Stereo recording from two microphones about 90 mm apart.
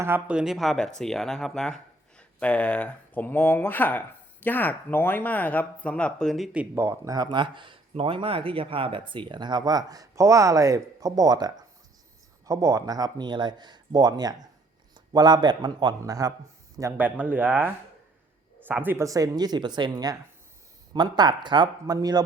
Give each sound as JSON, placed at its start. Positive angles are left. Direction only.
{"t": 0.3, "sound": "speech", "side_deg": -5}
{"t": 6.7, "sound": "speech", "side_deg": -30}
{"t": 7.2, "sound": "a man's voice", "side_deg": -60}
{"t": 16.0, "sound": "speech", "side_deg": -40}
{"t": 17.0, "sound": "speech", "side_deg": -20}
{"t": 18.7, "sound": "speech", "side_deg": -20}
{"t": 19.0, "sound": "speech", "side_deg": -40}
{"t": 21.9, "sound": "speech", "side_deg": -45}